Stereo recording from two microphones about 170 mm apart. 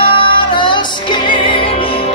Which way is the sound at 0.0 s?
30° left (ahead or behind).